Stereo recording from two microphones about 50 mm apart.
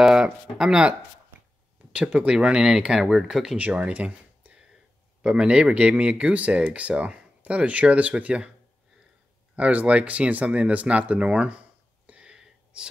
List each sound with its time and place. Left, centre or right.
0.1 s speech: centre
1.9 s speech: centre
3.5 s speech: right
5.2 s speech: centre
9.6 s speech: right
12.1 s whispering: right